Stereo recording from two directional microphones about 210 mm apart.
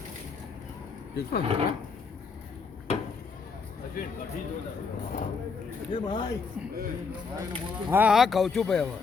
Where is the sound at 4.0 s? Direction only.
40° left (ahead or behind).